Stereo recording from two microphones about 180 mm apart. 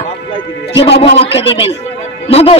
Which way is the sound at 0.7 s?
70° left (ahead or behind).